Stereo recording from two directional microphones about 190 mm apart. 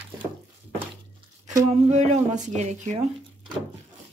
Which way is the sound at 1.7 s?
40° right (ahead or behind).